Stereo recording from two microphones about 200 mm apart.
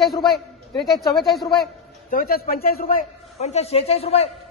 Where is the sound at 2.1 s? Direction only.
45° left (ahead or behind).